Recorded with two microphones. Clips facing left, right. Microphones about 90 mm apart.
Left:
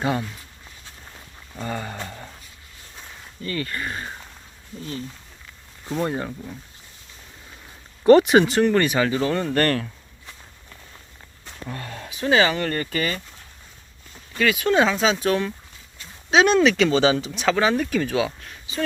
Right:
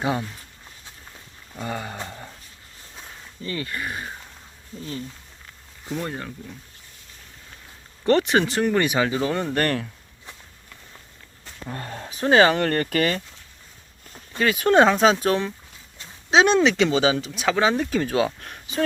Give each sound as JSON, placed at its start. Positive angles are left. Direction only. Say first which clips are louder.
{"t": 0.0, "sound": "speech", "louder": "left 1 dB", "side_deg": -15}
{"t": 1.5, "sound": "a sound", "louder": "left 1 dB", "side_deg": -10}
{"t": 3.4, "sound": "speech", "louder": "left 2 dB", "side_deg": -20}
{"t": 3.8, "sound": "speech", "louder": "left 1 dB", "side_deg": -5}
{"t": 4.8, "sound": "speech", "louder": "even", "side_deg": -30}
{"t": 6.0, "sound": "speech", "louder": "left 7 dB", "side_deg": 20}
{"t": 8.0, "sound": "speech", "louder": "left 6 dB", "side_deg": 15}
{"t": 11.7, "sound": "a sound", "louder": "right 1 dB", "side_deg": -30}
{"t": 12.1, "sound": "speech", "louder": "right 3 dB", "side_deg": -45}
{"t": 14.3, "sound": "speech", "louder": "right 2 dB", "side_deg": -35}
{"t": 16.0, "sound": "speech", "louder": "even", "side_deg": -25}
{"t": 16.9, "sound": "speech", "louder": "left 2 dB", "side_deg": -5}
{"t": 17.6, "sound": "speech", "louder": "right 1 dB", "side_deg": -20}
{"t": 18.3, "sound": "speech", "louder": "right 2 dB", "side_deg": -55}